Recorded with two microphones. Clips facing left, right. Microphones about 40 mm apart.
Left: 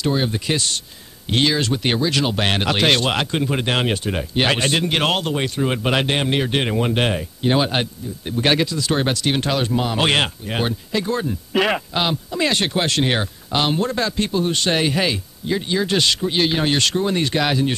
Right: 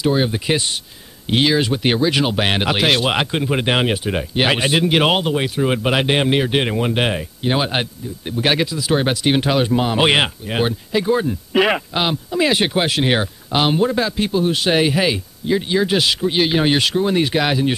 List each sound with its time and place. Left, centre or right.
0.0 s speech: centre